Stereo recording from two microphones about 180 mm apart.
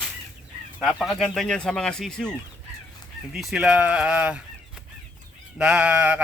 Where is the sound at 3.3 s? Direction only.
Centre (ahead or behind).